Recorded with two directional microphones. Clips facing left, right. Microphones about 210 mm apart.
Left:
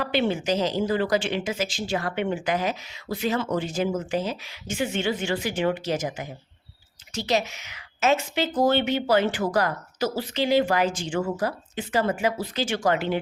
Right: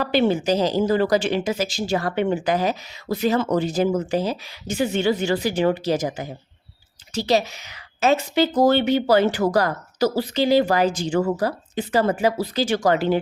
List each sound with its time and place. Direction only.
0.0 s a woman's voice: 40° right (ahead or behind)